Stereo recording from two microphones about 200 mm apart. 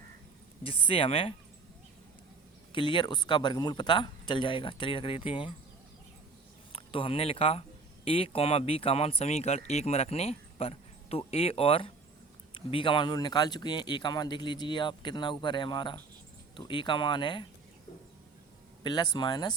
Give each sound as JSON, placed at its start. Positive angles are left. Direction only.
{"t": 0.6, "sound": "speech", "side_deg": 25}
{"t": 2.7, "sound": "speech", "side_deg": 25}
{"t": 6.7, "sound": "speech", "side_deg": 25}
{"t": 18.8, "sound": "a man's voice", "side_deg": 20}